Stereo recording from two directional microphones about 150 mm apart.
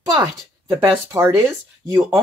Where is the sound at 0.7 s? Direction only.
20° right (ahead or behind).